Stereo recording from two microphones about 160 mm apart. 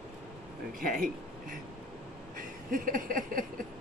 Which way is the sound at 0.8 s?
60° right (ahead or behind).